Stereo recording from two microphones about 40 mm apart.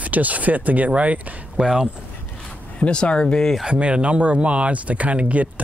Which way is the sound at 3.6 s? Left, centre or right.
Right.